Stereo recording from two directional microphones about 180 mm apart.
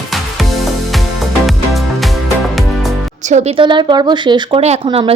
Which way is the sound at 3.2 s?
40° right (ahead or behind).